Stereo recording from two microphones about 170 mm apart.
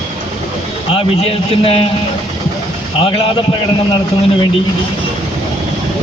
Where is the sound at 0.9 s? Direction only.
35° left (ahead or behind).